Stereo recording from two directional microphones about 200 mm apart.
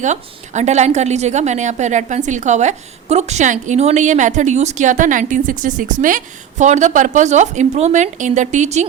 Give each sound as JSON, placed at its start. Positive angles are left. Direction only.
{"t": 0.0, "sound": "a woman's voice", "side_deg": -35}